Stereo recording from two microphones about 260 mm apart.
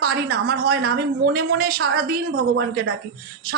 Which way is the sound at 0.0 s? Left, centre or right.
Right.